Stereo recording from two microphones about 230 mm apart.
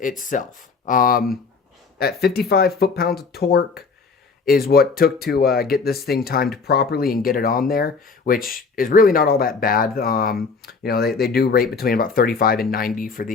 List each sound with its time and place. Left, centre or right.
0.0 s speech: left